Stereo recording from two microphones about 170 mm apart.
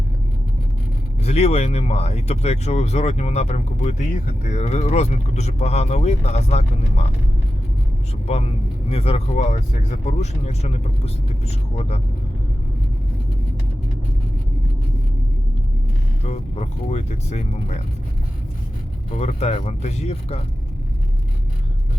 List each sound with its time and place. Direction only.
1.2 s speech: 40° left (ahead or behind)
8.9 s speech: 35° left (ahead or behind)
16.2 s speech: 40° left (ahead or behind)
19.1 s speech: 40° left (ahead or behind)